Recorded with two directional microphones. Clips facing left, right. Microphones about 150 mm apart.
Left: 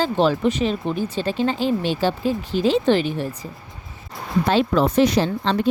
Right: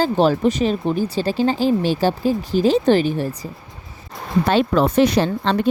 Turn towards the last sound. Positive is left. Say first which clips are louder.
# right 2 dB
turn(degrees=-60)  # may be behind; listen again after turning